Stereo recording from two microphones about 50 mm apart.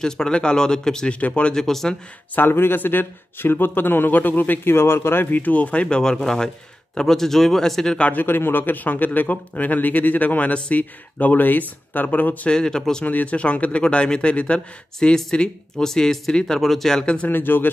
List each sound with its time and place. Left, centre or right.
0.0 s speech: centre
1.2 s speech: left
1.5 s speech: centre
2.3 s speech: left
4.7 s speech: left
5.4 s speech: left
8.1 s speech: left
12.4 s speech: centre
13.0 s speech: left
15.0 s speech: centre
17.0 s speech: left
17.3 s speech: left